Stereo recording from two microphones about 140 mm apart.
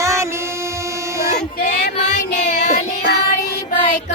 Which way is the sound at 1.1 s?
20° right (ahead or behind).